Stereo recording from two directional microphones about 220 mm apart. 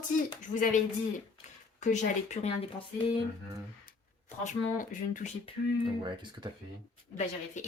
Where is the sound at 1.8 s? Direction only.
30° left (ahead or behind).